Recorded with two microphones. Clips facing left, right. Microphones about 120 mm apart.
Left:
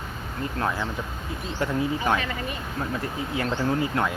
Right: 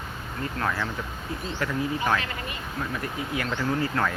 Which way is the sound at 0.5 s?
30° left (ahead or behind).